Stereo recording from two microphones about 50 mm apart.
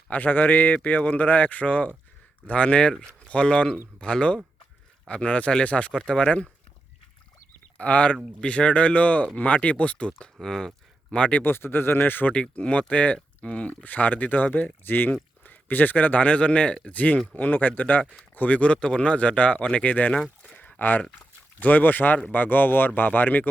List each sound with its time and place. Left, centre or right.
0.1 s speech: left; by 6.2 s centre
7.8 s speech: left
10.4 s speech: centre
11.1 s speech: left
11.4 s speech: left
12.3 s speech: left
18.9 s speech: centre
19.1 s speech: left
20.6 s a sound: left
21.6 s speech: left